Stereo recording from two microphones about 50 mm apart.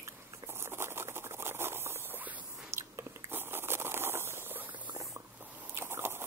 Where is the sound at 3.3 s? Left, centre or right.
Right.